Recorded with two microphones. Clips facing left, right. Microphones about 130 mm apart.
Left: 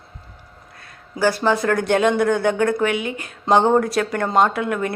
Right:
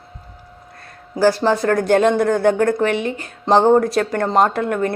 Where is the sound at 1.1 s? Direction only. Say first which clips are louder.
Right 3 dB; 35° right (ahead or behind).